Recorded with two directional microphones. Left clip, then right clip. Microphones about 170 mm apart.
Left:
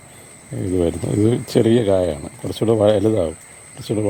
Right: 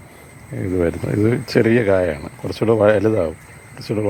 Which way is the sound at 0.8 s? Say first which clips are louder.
Even; 15° left (ahead or behind).